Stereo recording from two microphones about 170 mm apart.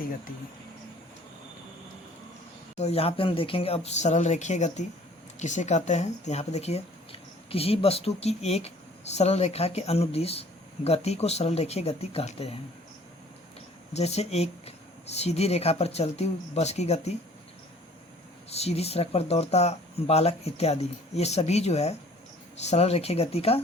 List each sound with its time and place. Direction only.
2.7 s speech: 40° left (ahead or behind)
13.9 s speech: 40° left (ahead or behind)
18.5 s speech: 40° left (ahead or behind)